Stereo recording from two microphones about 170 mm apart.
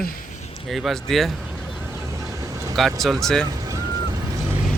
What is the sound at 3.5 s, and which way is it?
Vehicle, 20° right (ahead or behind).